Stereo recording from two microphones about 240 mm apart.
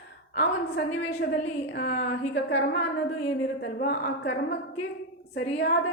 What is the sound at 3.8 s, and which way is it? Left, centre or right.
A woman's voice, left.